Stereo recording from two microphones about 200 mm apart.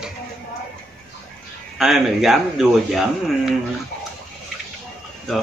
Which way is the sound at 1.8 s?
Centre (ahead or behind).